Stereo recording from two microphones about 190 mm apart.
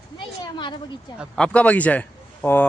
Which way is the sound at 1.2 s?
5° left (ahead or behind).